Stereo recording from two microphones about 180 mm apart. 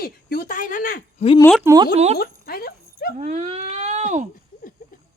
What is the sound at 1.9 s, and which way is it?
Speech, 35° right (ahead or behind).